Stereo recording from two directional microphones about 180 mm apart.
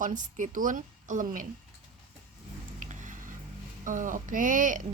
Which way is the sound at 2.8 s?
45° right (ahead or behind).